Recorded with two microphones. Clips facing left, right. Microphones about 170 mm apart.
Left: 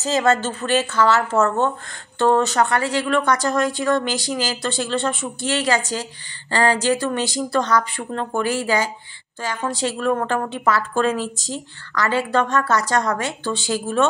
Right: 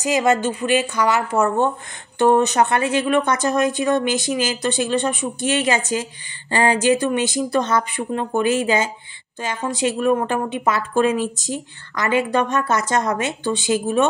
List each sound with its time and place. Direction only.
0.0 s a woman's voice: 15° right (ahead or behind)